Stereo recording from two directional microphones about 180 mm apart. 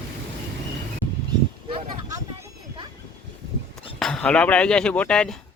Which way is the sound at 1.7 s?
20° right (ahead or behind).